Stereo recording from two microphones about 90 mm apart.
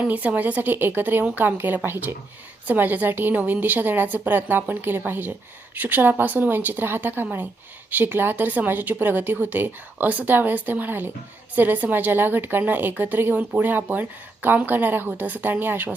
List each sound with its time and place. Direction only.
0.0 s speech: 20° right (ahead or behind)